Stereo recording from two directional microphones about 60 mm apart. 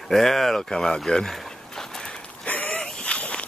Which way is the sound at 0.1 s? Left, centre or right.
Centre.